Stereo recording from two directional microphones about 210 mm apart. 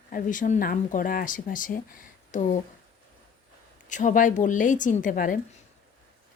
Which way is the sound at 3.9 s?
35° left (ahead or behind).